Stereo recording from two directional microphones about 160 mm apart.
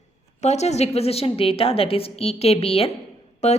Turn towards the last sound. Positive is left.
turn(degrees=45)  # may be behind; listen again after turning